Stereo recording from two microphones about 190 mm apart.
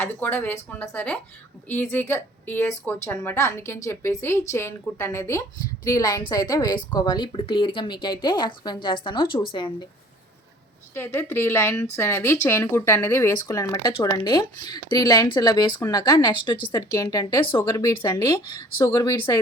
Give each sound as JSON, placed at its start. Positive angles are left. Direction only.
{"t": 0.0, "sound": "a woman's voice", "side_deg": 10}
{"t": 10.9, "sound": "a woman's voice", "side_deg": 10}